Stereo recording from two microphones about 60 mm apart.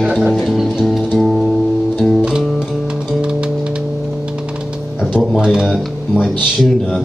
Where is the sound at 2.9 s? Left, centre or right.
Centre.